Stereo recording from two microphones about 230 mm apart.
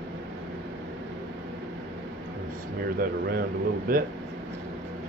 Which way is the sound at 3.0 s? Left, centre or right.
Right.